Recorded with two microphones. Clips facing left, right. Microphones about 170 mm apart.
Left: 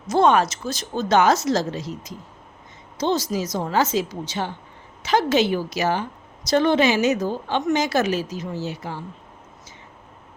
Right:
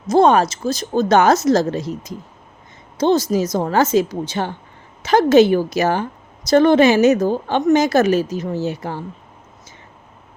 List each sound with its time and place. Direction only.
0.1 s a woman's voice: 35° right (ahead or behind)